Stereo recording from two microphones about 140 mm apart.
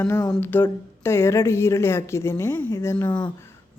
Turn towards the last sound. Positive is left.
turn(degrees=15)  # may be behind; listen again after turning